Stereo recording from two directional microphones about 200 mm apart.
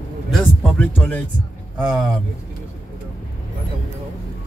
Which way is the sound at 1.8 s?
5° right (ahead or behind).